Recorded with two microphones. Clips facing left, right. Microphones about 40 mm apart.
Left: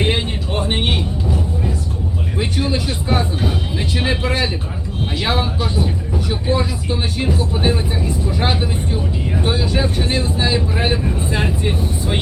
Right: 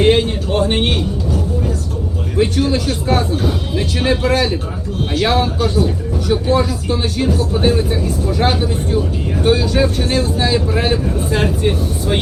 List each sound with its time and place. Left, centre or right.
0.0 s music: left
2.4 s music: left
3.8 s speech: left